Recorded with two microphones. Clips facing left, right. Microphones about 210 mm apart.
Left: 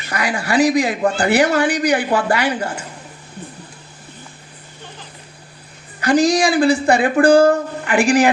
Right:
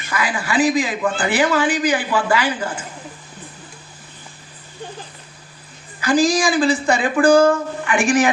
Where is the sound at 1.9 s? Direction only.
65° left (ahead or behind).